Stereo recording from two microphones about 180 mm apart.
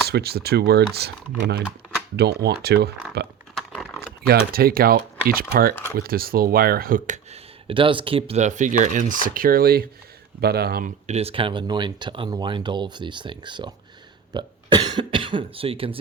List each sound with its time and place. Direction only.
0.1 s speech: 60° right (ahead or behind)
3.5 s a sound: centre (ahead or behind)
4.3 s speech: 55° right (ahead or behind)
7.7 s speech: 30° right (ahead or behind); by 10.9 s 55° right (ahead or behind)
11.0 s speech: 35° right (ahead or behind)